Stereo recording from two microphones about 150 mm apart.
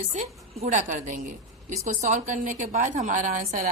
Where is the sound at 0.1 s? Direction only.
55° right (ahead or behind).